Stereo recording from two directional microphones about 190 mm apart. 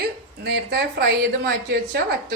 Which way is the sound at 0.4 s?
60° right (ahead or behind).